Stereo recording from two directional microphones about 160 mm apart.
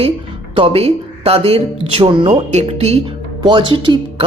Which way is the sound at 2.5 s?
40° right (ahead or behind).